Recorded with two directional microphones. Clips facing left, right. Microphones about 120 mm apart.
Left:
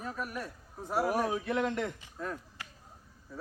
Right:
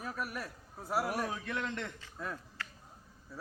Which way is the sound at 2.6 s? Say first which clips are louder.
Right 2 dB; 15° left (ahead or behind).